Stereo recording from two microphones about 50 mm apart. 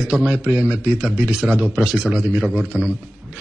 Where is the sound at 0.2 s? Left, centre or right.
Right.